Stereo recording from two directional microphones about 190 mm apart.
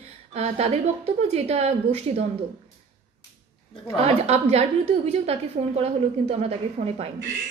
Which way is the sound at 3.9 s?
35° right (ahead or behind).